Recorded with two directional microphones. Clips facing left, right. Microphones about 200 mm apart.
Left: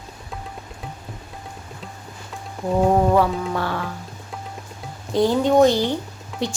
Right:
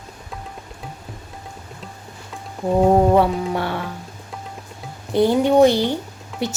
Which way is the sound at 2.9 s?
25° right (ahead or behind).